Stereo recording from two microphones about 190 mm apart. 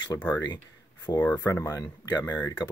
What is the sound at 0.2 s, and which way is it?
Speech, 15° left (ahead or behind).